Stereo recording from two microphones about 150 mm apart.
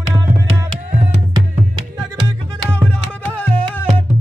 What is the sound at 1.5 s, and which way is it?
Music, 35° right (ahead or behind).